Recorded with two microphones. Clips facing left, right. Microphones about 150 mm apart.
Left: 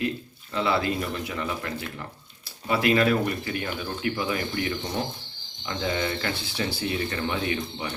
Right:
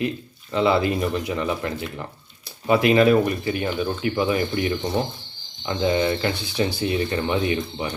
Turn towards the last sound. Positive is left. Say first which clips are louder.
# right 5 dB
turn(degrees=-20)  # may be behind; listen again after turning